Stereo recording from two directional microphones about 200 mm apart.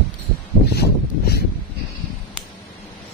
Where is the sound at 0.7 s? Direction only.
55° left (ahead or behind).